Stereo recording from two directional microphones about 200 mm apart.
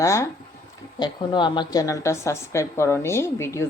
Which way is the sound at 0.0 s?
15° left (ahead or behind).